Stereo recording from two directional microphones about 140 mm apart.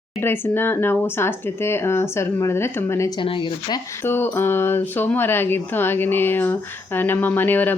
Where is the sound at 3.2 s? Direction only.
35° left (ahead or behind).